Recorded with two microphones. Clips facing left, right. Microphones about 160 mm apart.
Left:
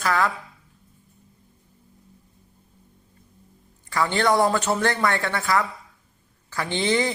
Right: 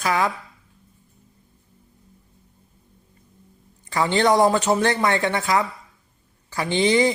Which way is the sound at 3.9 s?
20° right (ahead or behind).